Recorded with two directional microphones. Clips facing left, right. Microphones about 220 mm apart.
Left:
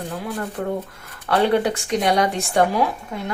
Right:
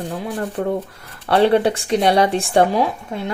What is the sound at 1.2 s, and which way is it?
Speech, 30° right (ahead or behind).